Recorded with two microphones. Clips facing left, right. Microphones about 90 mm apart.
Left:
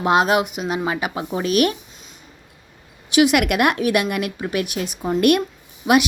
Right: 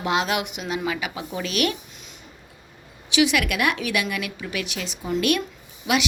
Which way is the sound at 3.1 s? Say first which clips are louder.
Left 5 dB; 50° left (ahead or behind).